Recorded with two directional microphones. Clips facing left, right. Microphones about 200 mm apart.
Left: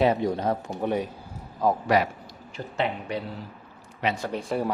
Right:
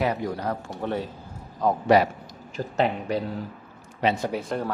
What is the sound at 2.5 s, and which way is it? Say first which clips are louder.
Speech: right 4 dB; 40° right (ahead or behind).